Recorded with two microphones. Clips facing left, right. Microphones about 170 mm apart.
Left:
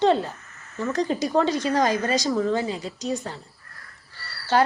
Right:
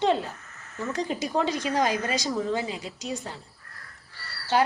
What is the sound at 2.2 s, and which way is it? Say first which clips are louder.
Speech: left 4 dB; 10° right (ahead or behind).